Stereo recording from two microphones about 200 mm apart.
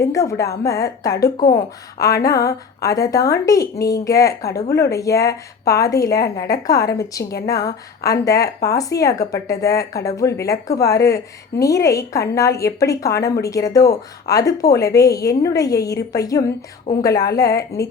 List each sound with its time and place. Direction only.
0.0 s speech: 15° left (ahead or behind)